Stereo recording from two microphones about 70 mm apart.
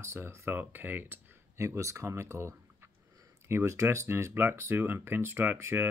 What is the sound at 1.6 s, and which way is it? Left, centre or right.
Speech, right.